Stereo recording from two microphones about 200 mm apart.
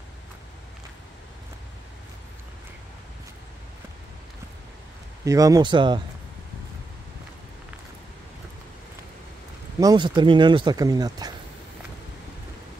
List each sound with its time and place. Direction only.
5.2 s speech: 15° right (ahead or behind)
9.8 s speech: 20° right (ahead or behind)